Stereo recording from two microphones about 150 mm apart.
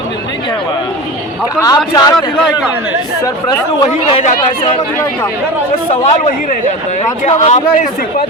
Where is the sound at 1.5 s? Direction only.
25° left (ahead or behind).